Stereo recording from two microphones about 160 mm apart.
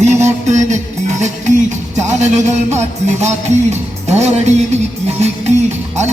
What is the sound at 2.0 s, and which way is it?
Music, 45° right (ahead or behind).